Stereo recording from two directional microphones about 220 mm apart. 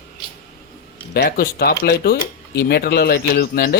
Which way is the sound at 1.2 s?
40° left (ahead or behind).